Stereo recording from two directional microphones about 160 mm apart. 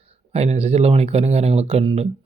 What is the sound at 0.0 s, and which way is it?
Speech, 40° right (ahead or behind).